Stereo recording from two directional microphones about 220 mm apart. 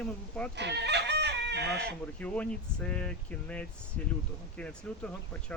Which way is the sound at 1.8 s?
5° left (ahead or behind).